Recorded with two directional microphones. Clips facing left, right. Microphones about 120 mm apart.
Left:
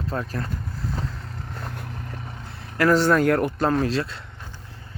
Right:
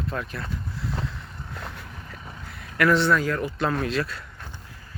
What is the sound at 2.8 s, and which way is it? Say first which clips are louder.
Speech: left 2 dB; 40° left (ahead or behind).